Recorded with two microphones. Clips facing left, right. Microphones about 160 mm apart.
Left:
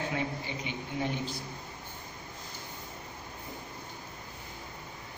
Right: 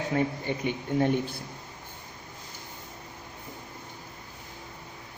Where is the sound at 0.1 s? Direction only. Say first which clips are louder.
Right 6 dB; 50° right (ahead or behind).